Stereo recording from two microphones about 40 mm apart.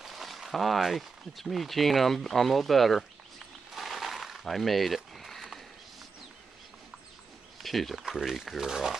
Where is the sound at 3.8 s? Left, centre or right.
Centre.